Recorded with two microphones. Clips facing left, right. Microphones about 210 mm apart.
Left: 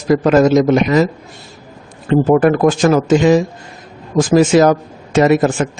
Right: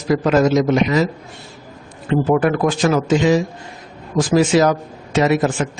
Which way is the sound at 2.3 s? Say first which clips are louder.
Left 5 dB; 45° left (ahead or behind).